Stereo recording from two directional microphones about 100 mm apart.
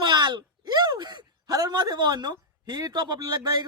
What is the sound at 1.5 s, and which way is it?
A woman's voice, 40° right (ahead or behind).